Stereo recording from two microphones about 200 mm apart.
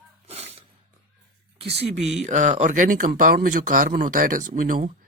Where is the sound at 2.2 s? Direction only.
35° right (ahead or behind).